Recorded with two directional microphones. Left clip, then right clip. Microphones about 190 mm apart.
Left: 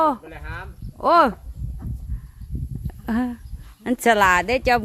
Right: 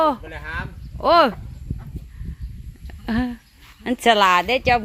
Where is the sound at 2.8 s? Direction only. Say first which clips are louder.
Right 1 dB; 5° left (ahead or behind).